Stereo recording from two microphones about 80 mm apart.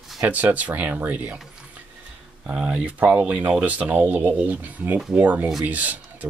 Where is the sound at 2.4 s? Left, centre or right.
Centre.